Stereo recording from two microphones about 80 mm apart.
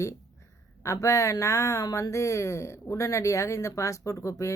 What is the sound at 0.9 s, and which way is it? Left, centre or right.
Speech, left.